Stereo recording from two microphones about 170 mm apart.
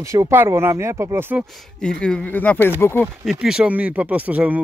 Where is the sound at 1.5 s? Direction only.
5° left (ahead or behind).